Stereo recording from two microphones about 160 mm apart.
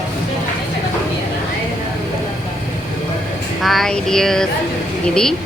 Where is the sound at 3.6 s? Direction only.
Centre (ahead or behind).